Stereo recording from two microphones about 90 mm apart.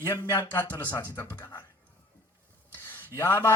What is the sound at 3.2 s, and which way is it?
Speech, 25° left (ahead or behind).